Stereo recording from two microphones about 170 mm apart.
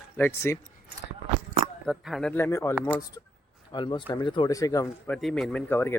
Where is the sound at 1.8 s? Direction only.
Centre (ahead or behind).